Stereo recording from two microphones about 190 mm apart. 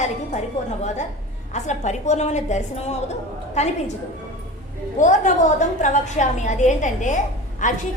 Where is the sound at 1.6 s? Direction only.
40° left (ahead or behind).